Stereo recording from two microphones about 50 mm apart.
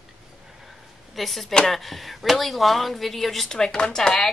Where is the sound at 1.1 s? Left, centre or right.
Centre.